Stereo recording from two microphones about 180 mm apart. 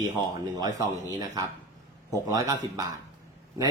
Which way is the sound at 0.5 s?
20° right (ahead or behind).